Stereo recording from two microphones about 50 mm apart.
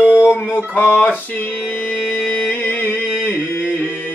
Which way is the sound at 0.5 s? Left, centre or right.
Left.